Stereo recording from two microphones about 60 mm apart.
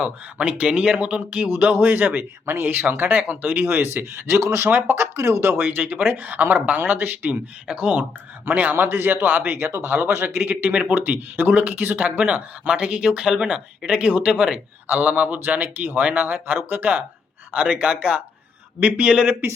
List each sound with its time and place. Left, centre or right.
0.3 s a man's voice: right
5.5 s speech: right
7.7 s speech: centre
8.4 s a man's voice: right; by 14.6 s centre
14.8 s speech: right